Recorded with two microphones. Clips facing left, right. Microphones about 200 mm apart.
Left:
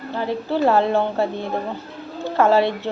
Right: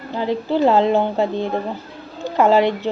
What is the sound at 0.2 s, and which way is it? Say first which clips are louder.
A woman's voice: right 3 dB; 15° right (ahead or behind).